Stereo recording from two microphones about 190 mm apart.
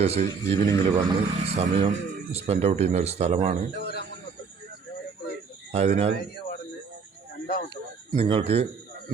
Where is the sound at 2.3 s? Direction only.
30° right (ahead or behind).